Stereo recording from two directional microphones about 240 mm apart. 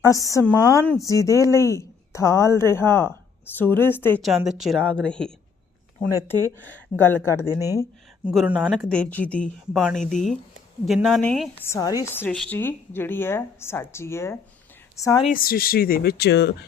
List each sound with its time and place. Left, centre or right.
0.0 s speech: centre
8.3 s a woman's voice: centre
15.2 s speech: left